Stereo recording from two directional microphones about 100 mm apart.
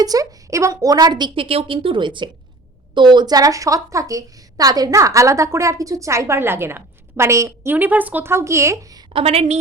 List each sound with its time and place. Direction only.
0.0 s a woman's voice: 35° right (ahead or behind)
1.5 s a woman's voice: 65° right (ahead or behind); by 9.0 s 35° right (ahead or behind)
9.1 s a woman's voice: 85° right